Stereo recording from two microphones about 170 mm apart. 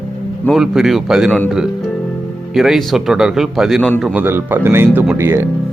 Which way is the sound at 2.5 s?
Centre (ahead or behind).